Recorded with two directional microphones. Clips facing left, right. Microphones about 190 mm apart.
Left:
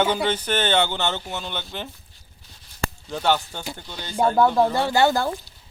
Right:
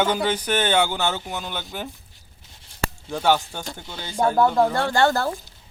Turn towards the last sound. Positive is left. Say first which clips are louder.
# left 1 dB
turn(degrees=0)  # may be behind; listen again after turning